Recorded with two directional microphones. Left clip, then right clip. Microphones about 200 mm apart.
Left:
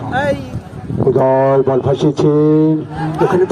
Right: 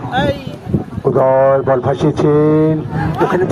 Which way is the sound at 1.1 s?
35° right (ahead or behind).